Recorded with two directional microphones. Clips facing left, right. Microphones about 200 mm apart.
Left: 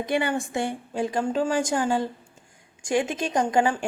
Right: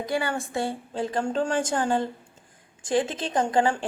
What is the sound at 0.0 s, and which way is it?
A woman's voice, 20° left (ahead or behind).